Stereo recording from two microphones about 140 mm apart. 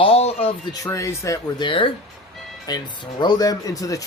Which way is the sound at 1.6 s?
35° left (ahead or behind).